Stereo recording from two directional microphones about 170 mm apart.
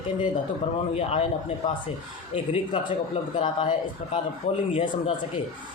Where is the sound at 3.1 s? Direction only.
30° left (ahead or behind).